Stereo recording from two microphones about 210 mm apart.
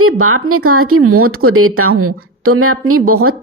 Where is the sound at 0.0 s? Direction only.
85° right.